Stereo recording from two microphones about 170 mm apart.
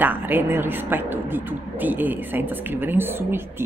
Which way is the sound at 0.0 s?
10° right (ahead or behind).